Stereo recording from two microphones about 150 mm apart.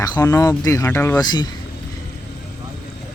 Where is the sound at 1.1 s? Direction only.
30° left (ahead or behind).